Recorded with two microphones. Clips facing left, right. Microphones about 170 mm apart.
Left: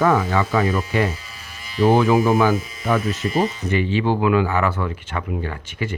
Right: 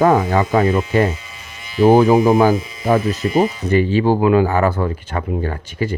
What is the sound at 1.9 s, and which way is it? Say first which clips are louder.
Speech: right 5 dB; 40° right (ahead or behind).